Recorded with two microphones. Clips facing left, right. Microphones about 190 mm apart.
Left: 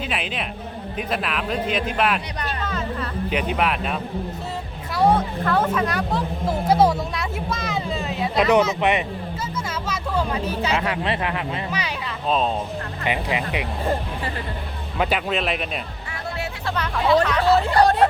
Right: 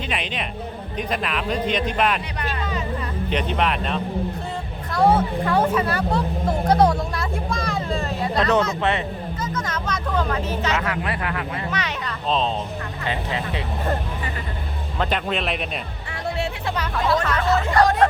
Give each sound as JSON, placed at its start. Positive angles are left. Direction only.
{"t": 0.1, "sound": "a man's voice", "side_deg": 5}
{"t": 3.2, "sound": "speech", "side_deg": 5}
{"t": 4.9, "sound": "speech", "side_deg": -5}
{"t": 8.4, "sound": "speech", "side_deg": 15}
{"t": 10.8, "sound": "speech", "side_deg": 25}
{"t": 11.7, "sound": "speech", "side_deg": 10}
{"t": 14.9, "sound": "a man's voice", "side_deg": 10}
{"t": 16.6, "sound": "speech", "side_deg": -10}
{"t": 17.5, "sound": "speech", "side_deg": 30}